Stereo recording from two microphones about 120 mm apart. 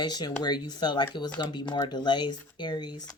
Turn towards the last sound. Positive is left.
turn(degrees=35)  # may be behind; listen again after turning